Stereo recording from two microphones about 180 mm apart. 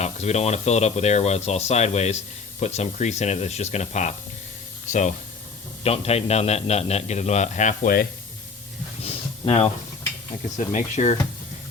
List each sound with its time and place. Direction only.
0.0 s a man's voice: 40° left (ahead or behind)
9.0 s a sound: 35° left (ahead or behind)
10.7 s a man's voice: 40° left (ahead or behind)